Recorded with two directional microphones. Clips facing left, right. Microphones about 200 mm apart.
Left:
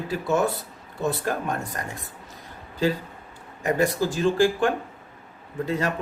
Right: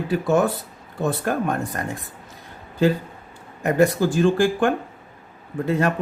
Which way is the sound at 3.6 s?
55° right (ahead or behind).